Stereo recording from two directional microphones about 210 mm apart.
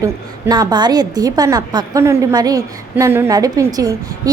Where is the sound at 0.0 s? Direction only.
15° right (ahead or behind).